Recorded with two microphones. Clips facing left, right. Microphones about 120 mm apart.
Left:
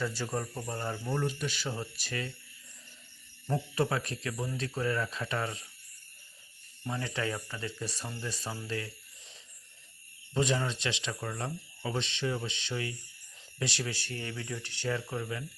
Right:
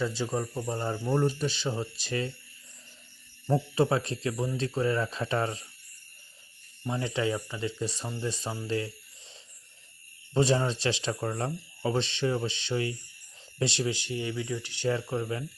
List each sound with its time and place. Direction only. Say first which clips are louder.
0.0 s speech: right 4 dB; 20° right (ahead or behind)
3.4 s speech: right 5 dB; 25° right (ahead or behind)
6.8 s speech: right 5 dB; 20° right (ahead or behind)
10.3 s speech: right 5 dB; 35° right (ahead or behind); by 14.8 s 10° right (ahead or behind)
14.8 s speech: right 5 dB; 25° right (ahead or behind)